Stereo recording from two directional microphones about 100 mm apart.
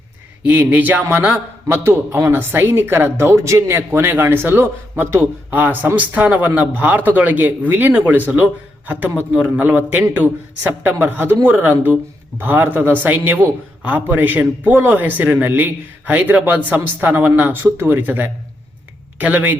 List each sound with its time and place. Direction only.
0.4 s speech: 15° right (ahead or behind)
1.7 s speech: 25° right (ahead or behind)